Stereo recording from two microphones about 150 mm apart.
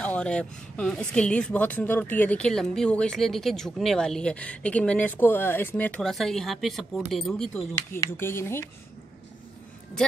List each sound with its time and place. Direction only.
0.0 s a woman's voice: 5° left (ahead or behind)